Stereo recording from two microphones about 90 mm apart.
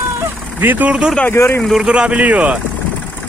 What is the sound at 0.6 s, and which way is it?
Speech, 20° right (ahead or behind).